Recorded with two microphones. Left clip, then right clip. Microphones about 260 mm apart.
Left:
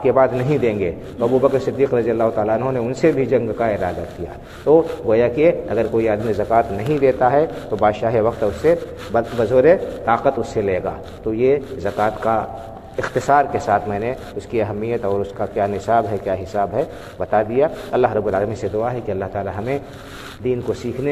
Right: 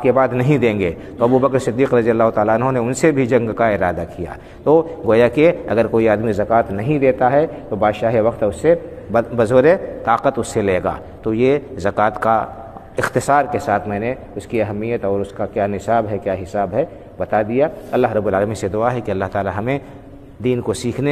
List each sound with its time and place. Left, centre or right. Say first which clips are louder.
0.0 s a man's voice: even; right